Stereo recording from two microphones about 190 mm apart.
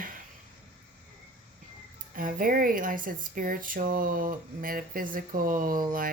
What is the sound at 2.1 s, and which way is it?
Speech, 50° right (ahead or behind).